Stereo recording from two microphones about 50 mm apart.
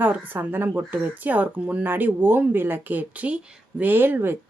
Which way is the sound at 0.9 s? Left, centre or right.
Right.